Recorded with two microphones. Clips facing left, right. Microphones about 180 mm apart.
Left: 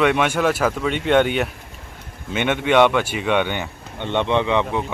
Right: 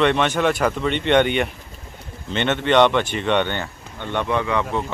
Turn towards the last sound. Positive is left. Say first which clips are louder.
# left 2 dB
turn(degrees=20)  # may be behind; listen again after turning